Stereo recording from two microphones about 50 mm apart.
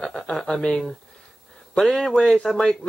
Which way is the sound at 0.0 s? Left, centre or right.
Centre.